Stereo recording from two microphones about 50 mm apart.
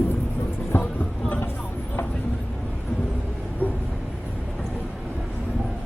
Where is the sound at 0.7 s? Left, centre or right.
Left.